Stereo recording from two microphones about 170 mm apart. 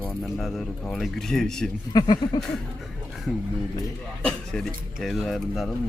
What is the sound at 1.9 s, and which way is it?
Speech, 25° left (ahead or behind).